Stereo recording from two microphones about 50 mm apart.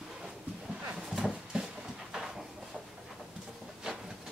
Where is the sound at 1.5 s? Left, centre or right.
Centre.